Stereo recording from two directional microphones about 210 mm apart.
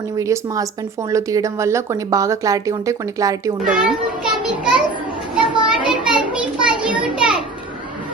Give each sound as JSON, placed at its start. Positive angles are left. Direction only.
{"t": 0.2, "sound": "speech", "side_deg": -15}
{"t": 3.6, "sound": "a child's voice", "side_deg": -5}
{"t": 4.4, "sound": "a sound", "side_deg": -5}